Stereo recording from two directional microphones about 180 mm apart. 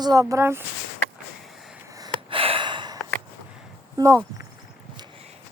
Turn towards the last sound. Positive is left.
turn(degrees=-15)  # may be behind; listen again after turning